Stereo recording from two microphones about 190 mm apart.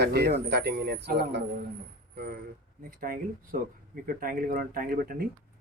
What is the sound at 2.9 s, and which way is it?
Speech, 50° right (ahead or behind).